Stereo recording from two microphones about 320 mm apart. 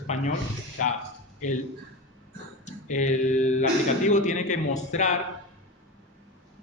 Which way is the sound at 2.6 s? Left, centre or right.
Left.